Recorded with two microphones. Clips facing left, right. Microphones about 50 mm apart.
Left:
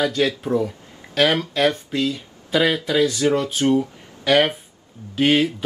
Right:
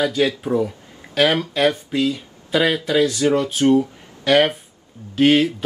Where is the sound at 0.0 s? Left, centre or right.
Centre.